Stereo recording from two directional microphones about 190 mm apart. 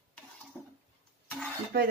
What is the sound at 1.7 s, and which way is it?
Speech, 65° right (ahead or behind).